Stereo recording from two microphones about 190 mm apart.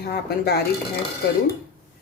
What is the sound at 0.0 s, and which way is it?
Speech, 55° left (ahead or behind).